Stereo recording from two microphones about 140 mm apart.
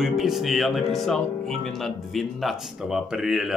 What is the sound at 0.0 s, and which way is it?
Speech, centre (ahead or behind).